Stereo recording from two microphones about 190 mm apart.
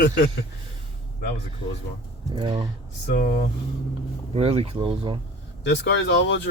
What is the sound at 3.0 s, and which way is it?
Speech, 50° left (ahead or behind).